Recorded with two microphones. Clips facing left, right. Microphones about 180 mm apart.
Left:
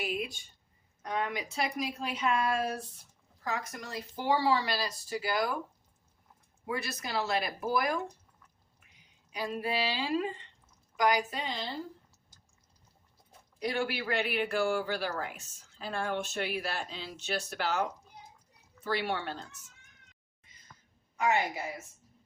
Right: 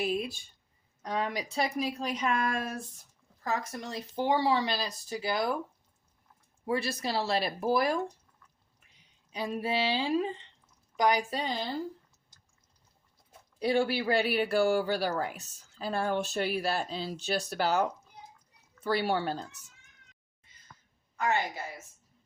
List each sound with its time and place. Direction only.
0.0 s a woman's voice: 35° right (ahead or behind)
3.8 s speech: 25° right (ahead or behind)
6.7 s speech: 30° right (ahead or behind)
9.3 s speech: 25° right (ahead or behind)
11.3 s speech: 35° right (ahead or behind)
13.6 s speech: 30° right (ahead or behind)
18.9 s speech: 35° right (ahead or behind)
21.2 s a woman's voice: 10° left (ahead or behind)